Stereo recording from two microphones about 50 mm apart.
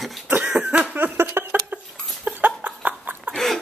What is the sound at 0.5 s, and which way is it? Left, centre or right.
Cough, right.